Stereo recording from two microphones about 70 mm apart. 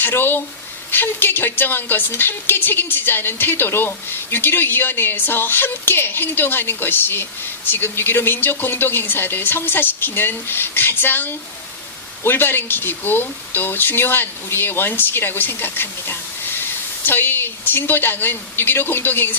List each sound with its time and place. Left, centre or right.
0.0 s speech: left